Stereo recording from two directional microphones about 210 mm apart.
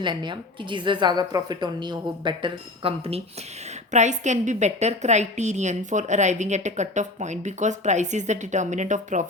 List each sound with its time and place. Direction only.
0.0 s a woman's voice: 20° right (ahead or behind)